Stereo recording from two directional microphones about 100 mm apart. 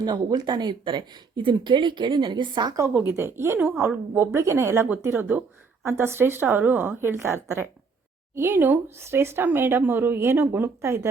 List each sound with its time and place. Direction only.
0.0 s speech: 45° right (ahead or behind)
3.1 s speech: 25° right (ahead or behind)